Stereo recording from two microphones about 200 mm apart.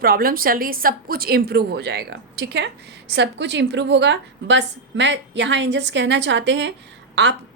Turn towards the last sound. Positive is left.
turn(degrees=-60)  # may be behind; listen again after turning